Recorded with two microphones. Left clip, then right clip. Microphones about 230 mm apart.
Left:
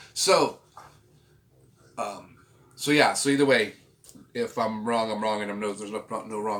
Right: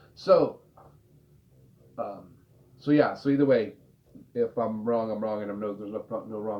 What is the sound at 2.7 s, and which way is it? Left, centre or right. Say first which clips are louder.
Speech: left 2 dB; left.